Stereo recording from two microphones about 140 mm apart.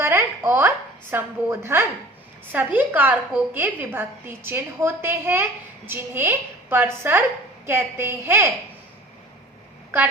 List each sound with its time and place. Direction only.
0.0 s a woman's voice: 20° right (ahead or behind)